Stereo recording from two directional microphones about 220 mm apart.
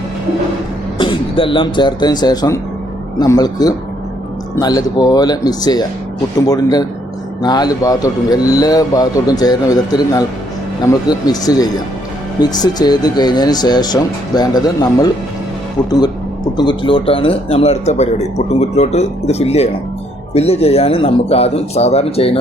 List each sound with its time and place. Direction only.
0.9 s speech: 25° left (ahead or behind)
16.6 s speech: 20° left (ahead or behind)